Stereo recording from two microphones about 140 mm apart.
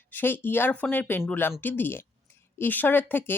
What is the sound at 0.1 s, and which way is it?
Speech, 15° left (ahead or behind).